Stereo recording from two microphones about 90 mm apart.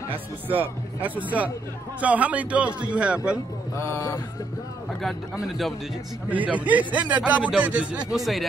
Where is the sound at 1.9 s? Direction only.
15° right (ahead or behind).